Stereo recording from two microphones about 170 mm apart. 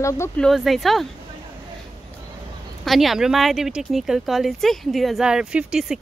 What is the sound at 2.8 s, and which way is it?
A woman's voice, centre (ahead or behind).